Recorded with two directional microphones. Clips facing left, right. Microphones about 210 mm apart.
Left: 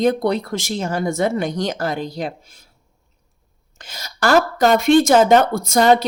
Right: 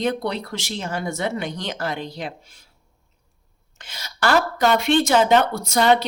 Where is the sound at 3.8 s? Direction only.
40° left (ahead or behind).